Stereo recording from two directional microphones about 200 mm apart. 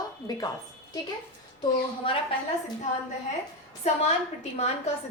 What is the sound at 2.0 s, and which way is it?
Speech, 25° left (ahead or behind).